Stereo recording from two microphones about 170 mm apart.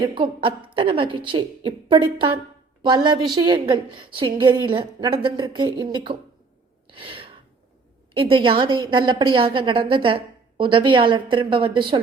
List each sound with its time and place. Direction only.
0.1 s a woman's voice: 30° right (ahead or behind)
6.8 s a sound: 30° right (ahead or behind)
8.1 s a woman's voice: 30° right (ahead or behind)